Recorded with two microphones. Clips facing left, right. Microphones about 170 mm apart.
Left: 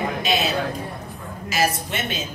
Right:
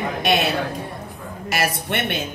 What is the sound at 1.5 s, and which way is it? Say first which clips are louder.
Speech: even; 60° right (ahead or behind).